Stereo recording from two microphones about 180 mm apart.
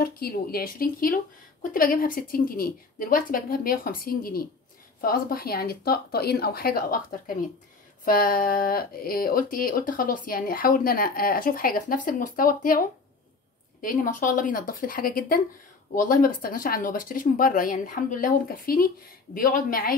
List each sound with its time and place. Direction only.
0.0 s speech: 55° left (ahead or behind)